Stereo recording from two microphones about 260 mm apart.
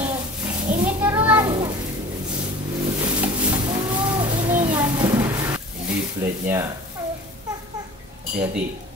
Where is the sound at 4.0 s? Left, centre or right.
Centre.